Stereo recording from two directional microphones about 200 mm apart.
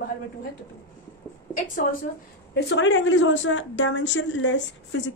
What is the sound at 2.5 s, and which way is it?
Speech, 65° left (ahead or behind).